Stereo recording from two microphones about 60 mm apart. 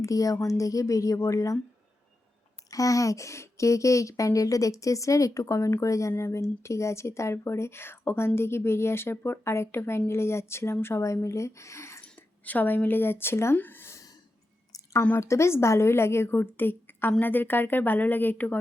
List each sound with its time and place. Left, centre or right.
0.0 s speech: left
0.3 s speech: left
2.6 s a woman's voice: left
11.0 s speech: left
12.0 s speech: left
13.6 s a sound: left
15.2 s a woman's voice: left